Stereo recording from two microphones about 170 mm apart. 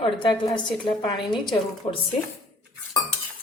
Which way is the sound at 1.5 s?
35° left (ahead or behind).